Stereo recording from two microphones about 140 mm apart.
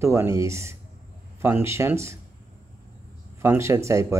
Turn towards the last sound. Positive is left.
turn(degrees=-20)  # may be behind; listen again after turning